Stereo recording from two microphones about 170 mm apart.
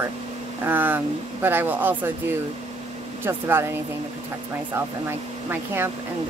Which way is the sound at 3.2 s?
15° right (ahead or behind).